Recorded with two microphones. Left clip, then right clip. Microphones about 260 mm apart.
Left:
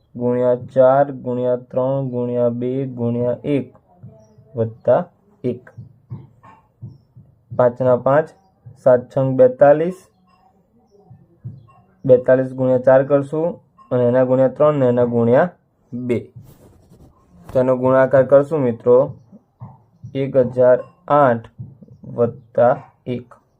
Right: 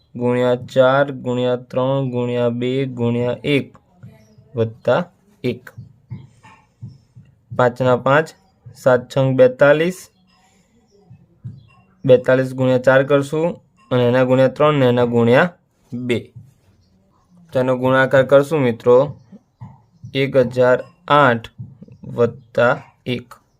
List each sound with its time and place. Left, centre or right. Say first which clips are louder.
0.2 s speech: even; right
7.8 s speech: even; right
12.0 s speech: even; right
17.5 s speech: left 1 dB; right